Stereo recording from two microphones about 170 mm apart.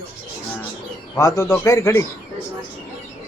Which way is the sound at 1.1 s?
20° left (ahead or behind).